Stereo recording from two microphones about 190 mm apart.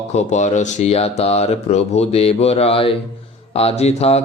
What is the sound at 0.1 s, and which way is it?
Speech, 35° left (ahead or behind).